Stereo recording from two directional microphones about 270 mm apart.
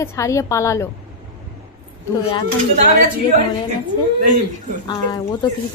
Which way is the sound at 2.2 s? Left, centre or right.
Centre.